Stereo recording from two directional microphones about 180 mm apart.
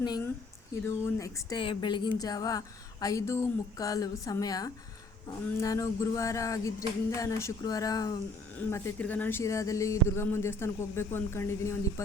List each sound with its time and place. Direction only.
0.9 s speech: 15° left (ahead or behind)